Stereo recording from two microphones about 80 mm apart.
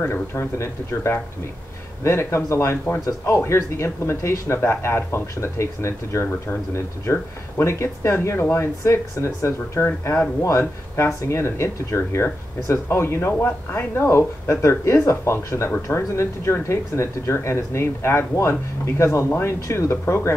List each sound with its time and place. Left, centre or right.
0.0 s speech: left
13.3 s speech: centre